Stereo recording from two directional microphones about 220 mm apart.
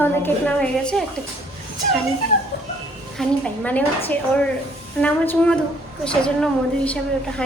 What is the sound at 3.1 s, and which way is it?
A woman's voice, 5° left (ahead or behind).